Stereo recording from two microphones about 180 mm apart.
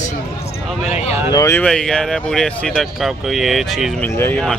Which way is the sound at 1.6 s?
5° left (ahead or behind).